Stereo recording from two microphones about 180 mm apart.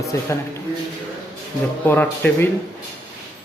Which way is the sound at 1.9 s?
10° left (ahead or behind).